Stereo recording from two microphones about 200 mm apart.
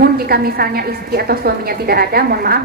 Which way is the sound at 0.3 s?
50° right (ahead or behind).